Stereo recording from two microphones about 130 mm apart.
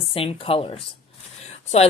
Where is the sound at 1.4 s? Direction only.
55° left (ahead or behind).